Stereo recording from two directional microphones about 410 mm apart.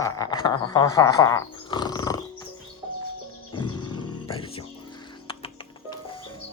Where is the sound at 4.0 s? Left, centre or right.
Centre.